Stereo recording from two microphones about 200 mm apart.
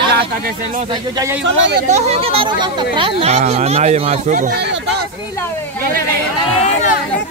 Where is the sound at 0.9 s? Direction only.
15° right (ahead or behind).